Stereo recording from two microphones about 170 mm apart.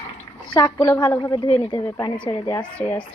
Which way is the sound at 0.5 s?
25° left (ahead or behind).